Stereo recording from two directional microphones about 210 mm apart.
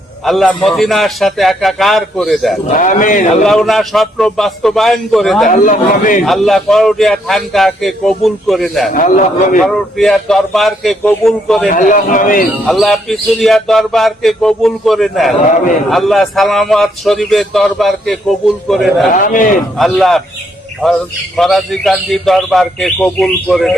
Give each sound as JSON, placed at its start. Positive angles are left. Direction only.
{"t": 0.3, "sound": "speech", "side_deg": 0}
{"t": 2.7, "sound": "a man's voice", "side_deg": 40}
{"t": 3.4, "sound": "speech", "side_deg": 0}
{"t": 5.5, "sound": "a man's voice", "side_deg": 40}
{"t": 6.2, "sound": "speech", "side_deg": 0}
{"t": 8.9, "sound": "a man's voice", "side_deg": 40}
{"t": 9.6, "sound": "speech", "side_deg": 0}
{"t": 11.7, "sound": "a man's voice", "side_deg": 40}
{"t": 12.6, "sound": "speech", "side_deg": 0}
{"t": 19.1, "sound": "a man's voice", "side_deg": 40}
{"t": 19.8, "sound": "speech", "side_deg": 0}